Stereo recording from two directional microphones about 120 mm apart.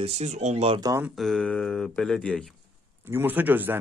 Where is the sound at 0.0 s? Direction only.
65° right (ahead or behind).